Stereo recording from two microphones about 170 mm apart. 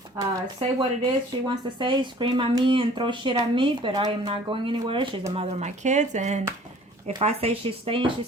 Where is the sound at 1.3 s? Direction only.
30° right (ahead or behind).